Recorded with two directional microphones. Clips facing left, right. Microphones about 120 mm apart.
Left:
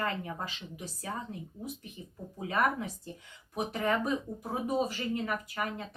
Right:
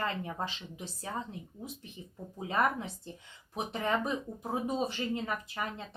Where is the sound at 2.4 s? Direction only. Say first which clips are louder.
Left 1 dB; 25° right (ahead or behind).